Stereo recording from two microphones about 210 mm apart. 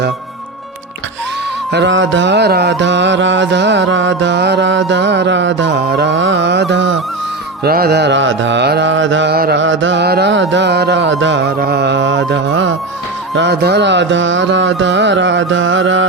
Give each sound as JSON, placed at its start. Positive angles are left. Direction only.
{"t": 1.7, "sound": "music", "side_deg": -60}
{"t": 7.6, "sound": "music", "side_deg": -45}